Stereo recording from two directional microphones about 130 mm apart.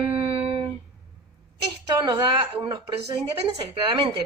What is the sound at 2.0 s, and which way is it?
Speech, 30° right (ahead or behind).